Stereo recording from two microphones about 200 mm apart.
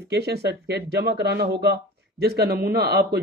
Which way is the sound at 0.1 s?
55° right (ahead or behind).